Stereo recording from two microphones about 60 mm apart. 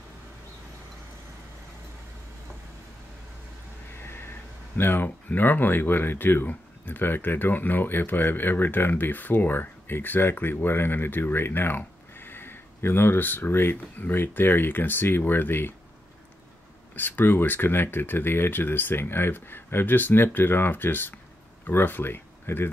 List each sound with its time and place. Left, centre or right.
4.0 s cat: left
4.7 s speech: left
16.9 s speech: left